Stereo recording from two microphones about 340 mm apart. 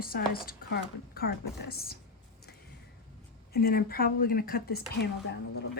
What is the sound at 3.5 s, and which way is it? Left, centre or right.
Speech, left.